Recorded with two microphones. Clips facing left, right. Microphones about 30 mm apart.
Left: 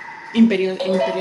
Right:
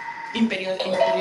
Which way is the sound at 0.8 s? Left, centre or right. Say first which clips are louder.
Left 2 dB; centre.